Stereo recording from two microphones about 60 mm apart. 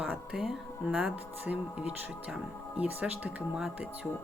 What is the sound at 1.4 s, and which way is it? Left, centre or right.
Speech, right.